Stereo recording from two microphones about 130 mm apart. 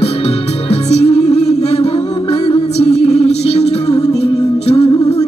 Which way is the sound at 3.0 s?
55° left (ahead or behind).